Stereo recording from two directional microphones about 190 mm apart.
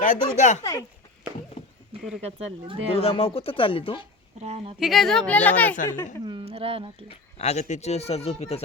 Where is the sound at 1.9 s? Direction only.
30° right (ahead or behind).